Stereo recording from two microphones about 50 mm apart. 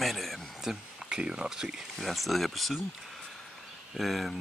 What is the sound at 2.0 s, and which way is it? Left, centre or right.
Speech, centre.